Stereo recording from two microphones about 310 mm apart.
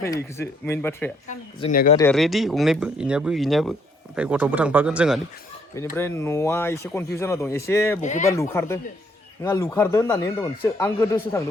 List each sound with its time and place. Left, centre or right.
0.0 s a man's voice: centre
1.3 s speech: left
2.0 s a man's voice: centre
8.0 s speech: left
8.3 s a man's voice: centre